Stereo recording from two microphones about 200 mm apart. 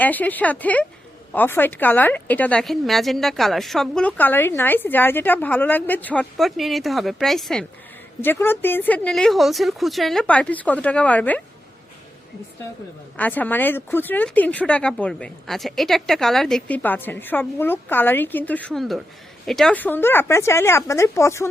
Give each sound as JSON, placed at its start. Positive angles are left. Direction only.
{"t": 0.0, "sound": "speech", "side_deg": 10}
{"t": 13.1, "sound": "speech", "side_deg": 10}